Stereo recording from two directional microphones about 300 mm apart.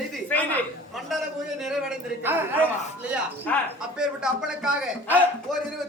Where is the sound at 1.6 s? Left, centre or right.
Centre.